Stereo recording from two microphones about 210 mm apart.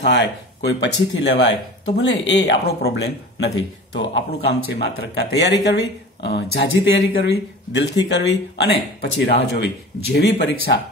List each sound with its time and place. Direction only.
0.0 s speech: 55° left (ahead or behind)